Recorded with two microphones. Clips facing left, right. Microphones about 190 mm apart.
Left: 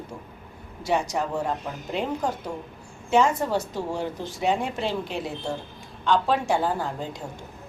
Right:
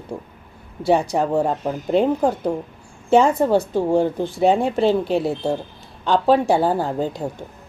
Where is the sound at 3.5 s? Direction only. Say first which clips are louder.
Right 9 dB; 55° right (ahead or behind).